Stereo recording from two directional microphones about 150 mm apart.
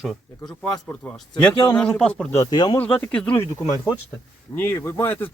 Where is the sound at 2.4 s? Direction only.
30° left (ahead or behind).